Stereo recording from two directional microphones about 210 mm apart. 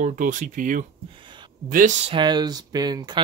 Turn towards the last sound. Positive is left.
turn(degrees=-20)  # may be behind; listen again after turning